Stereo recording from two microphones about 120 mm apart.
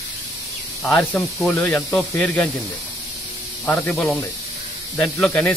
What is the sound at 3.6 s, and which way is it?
Speech, 15° left (ahead or behind).